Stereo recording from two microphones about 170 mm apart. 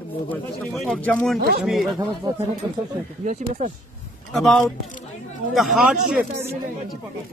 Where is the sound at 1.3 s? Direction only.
65° right (ahead or behind).